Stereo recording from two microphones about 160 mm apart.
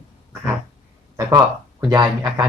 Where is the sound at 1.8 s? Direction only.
25° right (ahead or behind).